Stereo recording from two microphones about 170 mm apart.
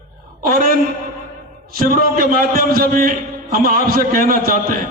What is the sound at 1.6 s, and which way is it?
A man's voice, 60° right (ahead or behind).